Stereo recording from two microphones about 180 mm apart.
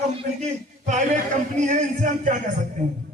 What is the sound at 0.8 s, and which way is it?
Speech, 40° right (ahead or behind).